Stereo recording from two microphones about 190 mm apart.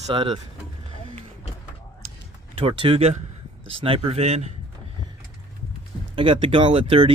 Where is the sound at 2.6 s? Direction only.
30° right (ahead or behind).